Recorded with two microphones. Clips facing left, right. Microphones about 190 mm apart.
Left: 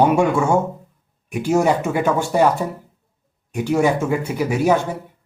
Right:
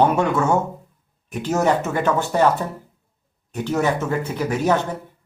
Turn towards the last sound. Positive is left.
turn(degrees=10)  # may be behind; listen again after turning